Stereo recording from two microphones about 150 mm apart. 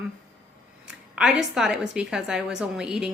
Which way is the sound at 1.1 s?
5° right (ahead or behind).